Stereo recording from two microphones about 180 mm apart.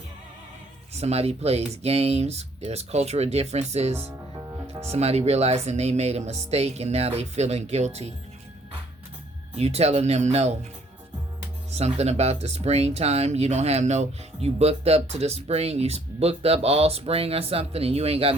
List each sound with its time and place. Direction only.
0.9 s speech: 35° right (ahead or behind)
4.6 s music: 15° right (ahead or behind)
4.9 s speech: 35° right (ahead or behind)
9.6 s speech: 35° right (ahead or behind)
11.7 s speech: 35° right (ahead or behind)